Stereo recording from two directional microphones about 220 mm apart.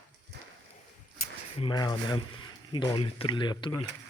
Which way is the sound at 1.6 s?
20° left (ahead or behind).